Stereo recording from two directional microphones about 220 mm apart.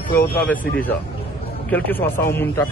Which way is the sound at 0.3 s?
5° left (ahead or behind).